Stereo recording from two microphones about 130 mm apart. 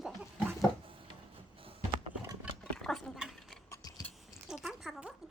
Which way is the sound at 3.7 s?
30° left (ahead or behind).